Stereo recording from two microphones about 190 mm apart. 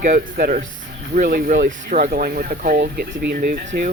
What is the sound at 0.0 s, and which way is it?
Speech, 50° right (ahead or behind).